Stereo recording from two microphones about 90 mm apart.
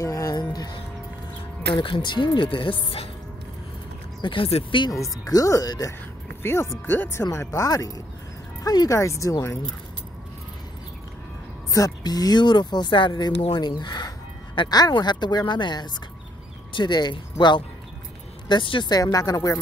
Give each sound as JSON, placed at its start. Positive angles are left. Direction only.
{"t": 0.0, "sound": "music", "side_deg": 40}
{"t": 1.8, "sound": "speech", "side_deg": 65}
{"t": 4.2, "sound": "speech", "side_deg": 75}
{"t": 4.9, "sound": "speech", "side_deg": 40}
{"t": 6.4, "sound": "speech", "side_deg": 25}
{"t": 11.7, "sound": "speech", "side_deg": 45}
{"t": 13.6, "sound": "music", "side_deg": 50}
{"t": 14.7, "sound": "speech", "side_deg": 50}